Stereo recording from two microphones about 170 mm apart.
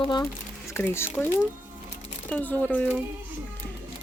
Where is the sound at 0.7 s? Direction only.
15° left (ahead or behind).